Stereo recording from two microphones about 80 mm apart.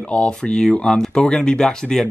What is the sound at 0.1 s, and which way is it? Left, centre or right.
Speech, centre.